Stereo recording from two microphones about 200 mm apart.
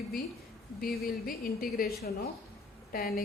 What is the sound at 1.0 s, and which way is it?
A woman's voice, 45° left (ahead or behind).